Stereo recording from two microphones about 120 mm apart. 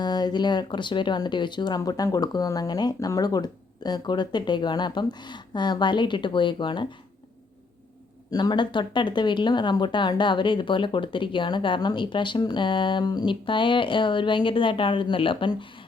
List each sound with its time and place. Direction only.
0.0 s speech: 35° left (ahead or behind)
8.3 s speech: 35° left (ahead or behind)